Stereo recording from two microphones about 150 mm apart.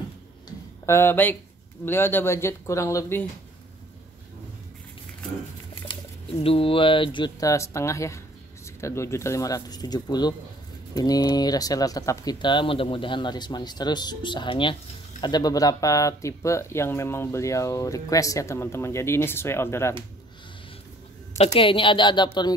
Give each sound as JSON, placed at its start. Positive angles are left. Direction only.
{"t": 0.5, "sound": "a sound", "side_deg": 15}
{"t": 1.9, "sound": "speech", "side_deg": 15}
{"t": 6.4, "sound": "speech", "side_deg": 40}
{"t": 21.5, "sound": "speech", "side_deg": 35}